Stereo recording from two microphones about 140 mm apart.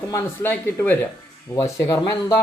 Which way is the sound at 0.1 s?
15° left (ahead or behind).